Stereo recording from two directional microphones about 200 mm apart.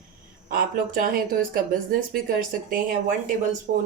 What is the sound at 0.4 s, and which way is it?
Speech, 45° right (ahead or behind).